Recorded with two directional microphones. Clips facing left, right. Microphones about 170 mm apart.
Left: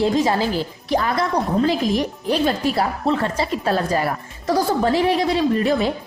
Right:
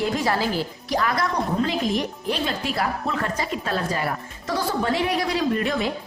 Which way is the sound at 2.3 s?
40° left (ahead or behind).